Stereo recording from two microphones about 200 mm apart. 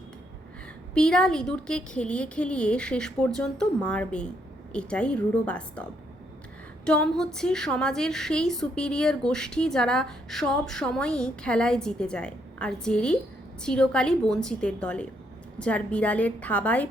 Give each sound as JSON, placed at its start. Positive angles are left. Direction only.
{"t": 0.9, "sound": "a woman's voice", "side_deg": 5}